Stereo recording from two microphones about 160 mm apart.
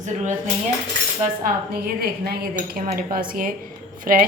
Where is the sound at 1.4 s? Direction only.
70° right (ahead or behind).